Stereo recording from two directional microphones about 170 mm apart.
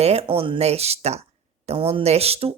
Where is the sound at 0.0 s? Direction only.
35° right (ahead or behind).